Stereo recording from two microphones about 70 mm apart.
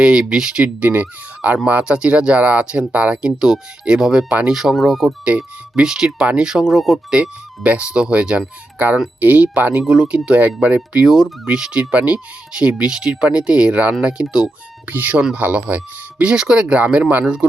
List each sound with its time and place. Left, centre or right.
0.0 s speech: centre
5.0 s speech: centre
7.2 s speech: centre
11.1 s speech: centre
14.8 s speech: right